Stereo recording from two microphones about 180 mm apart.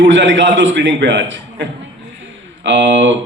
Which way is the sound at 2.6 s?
90° right.